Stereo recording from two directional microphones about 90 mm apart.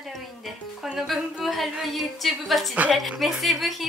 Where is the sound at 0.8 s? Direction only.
5° right (ahead or behind).